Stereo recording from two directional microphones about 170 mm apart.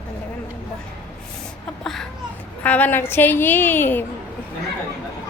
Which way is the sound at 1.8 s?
Centre (ahead or behind).